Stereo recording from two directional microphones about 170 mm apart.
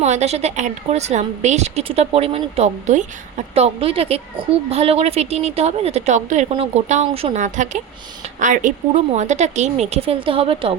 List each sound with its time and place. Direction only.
0.0 s speech: 40° right (ahead or behind)